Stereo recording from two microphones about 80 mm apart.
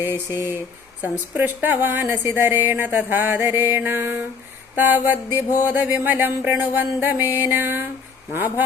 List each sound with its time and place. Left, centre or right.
0.0 s speech: right
4.7 s a sound: right
5.6 s speech: right